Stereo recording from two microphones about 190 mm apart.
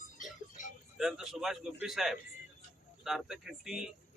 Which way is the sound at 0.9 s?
Centre (ahead or behind).